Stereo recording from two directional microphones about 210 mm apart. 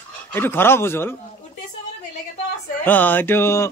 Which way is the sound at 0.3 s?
10° left (ahead or behind).